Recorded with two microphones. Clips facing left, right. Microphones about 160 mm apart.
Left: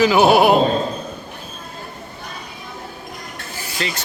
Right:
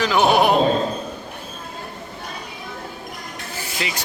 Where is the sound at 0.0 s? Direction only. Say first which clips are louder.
Left 4 dB; 5° left (ahead or behind).